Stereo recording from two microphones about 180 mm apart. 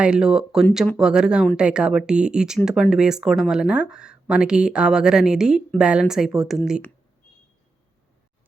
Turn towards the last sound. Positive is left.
turn(degrees=0)  # may be behind; listen again after turning